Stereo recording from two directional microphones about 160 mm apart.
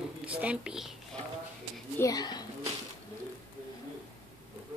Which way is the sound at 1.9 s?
20° left (ahead or behind).